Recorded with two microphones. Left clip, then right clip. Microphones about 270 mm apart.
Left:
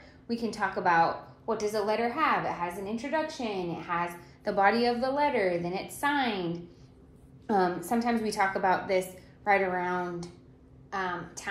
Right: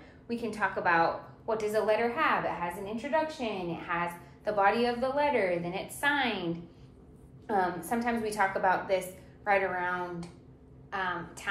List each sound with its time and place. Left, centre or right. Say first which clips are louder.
0.3 s a woman's voice: even; left